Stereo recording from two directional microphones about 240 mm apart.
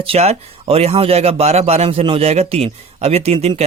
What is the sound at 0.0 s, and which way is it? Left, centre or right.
A man's voice, right.